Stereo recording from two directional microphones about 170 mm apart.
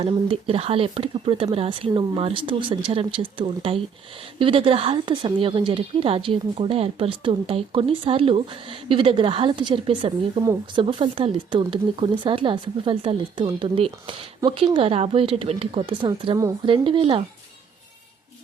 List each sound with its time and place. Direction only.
0.3 s speech: 35° right (ahead or behind)